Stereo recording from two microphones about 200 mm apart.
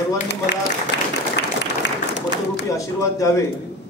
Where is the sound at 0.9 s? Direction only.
60° left (ahead or behind).